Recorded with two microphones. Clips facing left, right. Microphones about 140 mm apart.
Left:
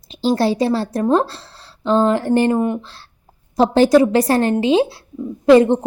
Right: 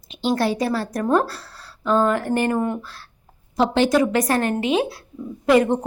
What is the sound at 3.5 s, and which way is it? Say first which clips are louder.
A woman's voice: left 6 dB; 40° left (ahead or behind).